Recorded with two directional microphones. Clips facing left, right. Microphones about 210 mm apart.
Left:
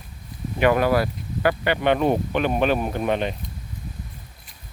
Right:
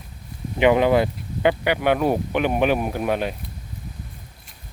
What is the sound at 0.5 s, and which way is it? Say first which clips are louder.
Speech: right 2 dB; 20° right (ahead or behind).